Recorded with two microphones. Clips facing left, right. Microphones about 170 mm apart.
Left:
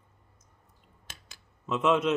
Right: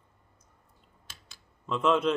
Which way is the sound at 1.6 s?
5° left (ahead or behind).